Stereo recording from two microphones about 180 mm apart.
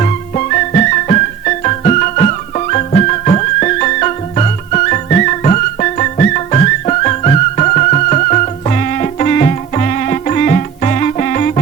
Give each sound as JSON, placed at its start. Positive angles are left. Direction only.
{"t": 0.0, "sound": "music", "side_deg": 45}